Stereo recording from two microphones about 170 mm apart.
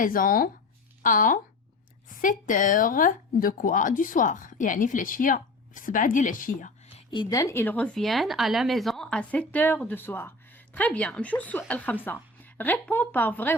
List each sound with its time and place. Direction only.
0.0 s speech: 55° left (ahead or behind)
7.1 s speech: 25° left (ahead or behind)